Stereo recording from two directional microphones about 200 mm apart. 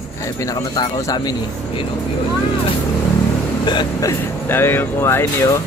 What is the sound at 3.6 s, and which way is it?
Vehicle, 20° left (ahead or behind).